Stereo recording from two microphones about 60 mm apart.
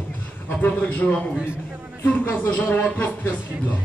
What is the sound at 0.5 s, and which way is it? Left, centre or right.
Speech, left.